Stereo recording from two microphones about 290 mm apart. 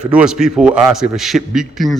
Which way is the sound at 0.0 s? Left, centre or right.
Centre.